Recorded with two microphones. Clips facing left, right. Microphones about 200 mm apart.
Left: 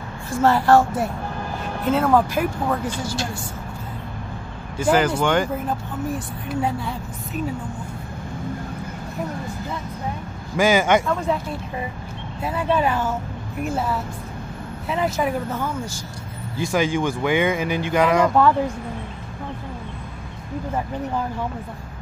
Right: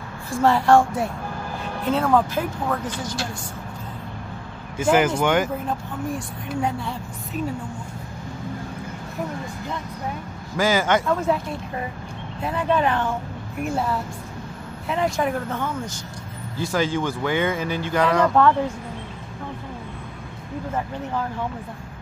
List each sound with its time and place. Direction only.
0.3 s a woman's voice: centre (ahead or behind)
5.2 s speech: 10° right (ahead or behind)
5.7 s a woman's voice: 5° left (ahead or behind)
10.5 s speech: 15° left (ahead or behind)
11.3 s a woman's voice: centre (ahead or behind)